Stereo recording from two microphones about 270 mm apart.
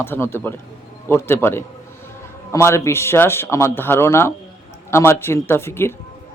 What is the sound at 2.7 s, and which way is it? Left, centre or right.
A man's voice, centre.